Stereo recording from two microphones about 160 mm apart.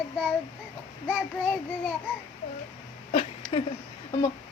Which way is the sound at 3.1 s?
45° left (ahead or behind).